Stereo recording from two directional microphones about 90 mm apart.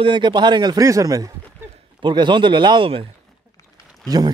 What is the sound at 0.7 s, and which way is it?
Speech, 40° right (ahead or behind).